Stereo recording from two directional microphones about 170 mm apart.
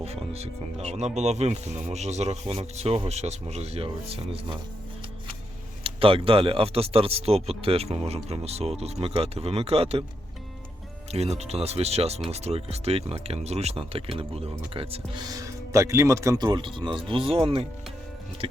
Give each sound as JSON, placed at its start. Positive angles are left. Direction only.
{"t": 0.0, "sound": "speech", "side_deg": -35}
{"t": 5.8, "sound": "speech", "side_deg": -30}
{"t": 11.1, "sound": "speech", "side_deg": -35}
{"t": 15.2, "sound": "speech", "side_deg": -20}